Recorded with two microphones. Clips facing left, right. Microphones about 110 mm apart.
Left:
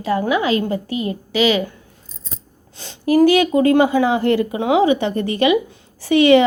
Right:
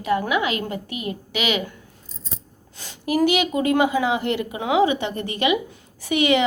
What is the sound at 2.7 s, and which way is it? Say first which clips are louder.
A woman's voice: left 7 dB; 30° left (ahead or behind).